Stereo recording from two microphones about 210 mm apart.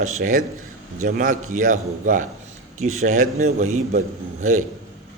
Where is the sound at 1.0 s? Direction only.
40° right (ahead or behind).